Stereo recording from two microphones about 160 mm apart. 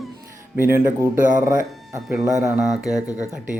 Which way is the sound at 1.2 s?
55° right (ahead or behind).